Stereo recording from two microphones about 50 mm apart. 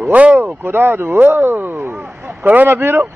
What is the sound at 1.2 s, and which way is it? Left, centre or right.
Speech, right.